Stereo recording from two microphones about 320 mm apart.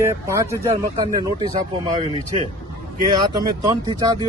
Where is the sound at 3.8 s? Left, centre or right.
Centre.